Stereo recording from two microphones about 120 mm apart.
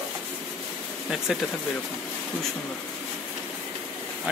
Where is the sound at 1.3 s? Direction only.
5° right (ahead or behind).